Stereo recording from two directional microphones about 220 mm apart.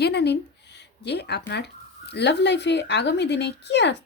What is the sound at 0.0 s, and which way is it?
Speech, 50° left (ahead or behind).